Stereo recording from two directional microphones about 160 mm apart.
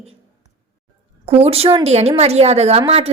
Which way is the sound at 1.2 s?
40° right (ahead or behind).